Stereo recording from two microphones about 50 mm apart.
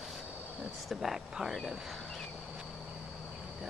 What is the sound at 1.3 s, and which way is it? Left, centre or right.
Cricket, centre.